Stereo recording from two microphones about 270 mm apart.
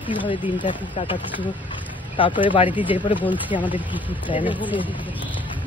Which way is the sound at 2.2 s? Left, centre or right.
Centre.